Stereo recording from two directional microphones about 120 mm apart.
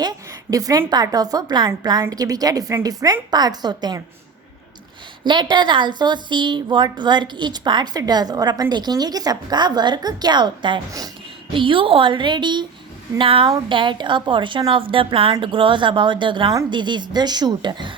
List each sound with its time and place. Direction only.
0.0 s a woman's voice: 30° right (ahead or behind)
5.2 s a woman's voice: 40° right (ahead or behind)